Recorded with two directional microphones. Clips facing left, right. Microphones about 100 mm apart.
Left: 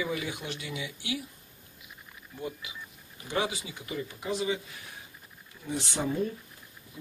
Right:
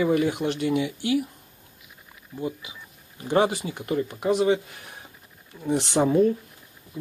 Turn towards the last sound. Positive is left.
turn(degrees=-70)  # may be behind; listen again after turning